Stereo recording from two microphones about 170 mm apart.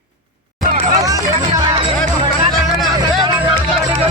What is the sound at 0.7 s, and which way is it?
Hubbub, 45° right (ahead or behind).